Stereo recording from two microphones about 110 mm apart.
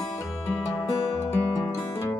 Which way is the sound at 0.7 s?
40° left (ahead or behind).